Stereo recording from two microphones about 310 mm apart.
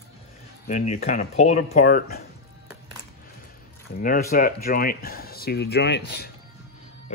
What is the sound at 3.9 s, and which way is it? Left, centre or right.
Speech, left.